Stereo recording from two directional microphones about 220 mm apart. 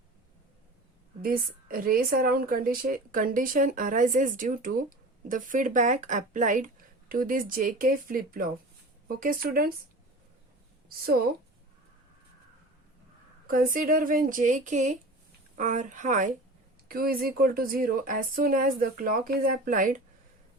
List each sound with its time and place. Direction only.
1.2 s a woman's voice: 40° right (ahead or behind)
10.8 s a woman's voice: 45° right (ahead or behind)
13.5 s a woman's voice: 40° right (ahead or behind)